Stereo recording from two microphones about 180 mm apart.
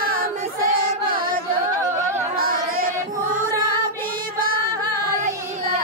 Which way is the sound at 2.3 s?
55° right (ahead or behind).